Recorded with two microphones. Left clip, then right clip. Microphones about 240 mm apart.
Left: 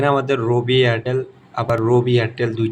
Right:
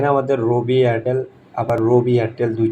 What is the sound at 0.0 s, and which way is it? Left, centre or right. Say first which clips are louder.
A man's voice: right 1 dB; centre.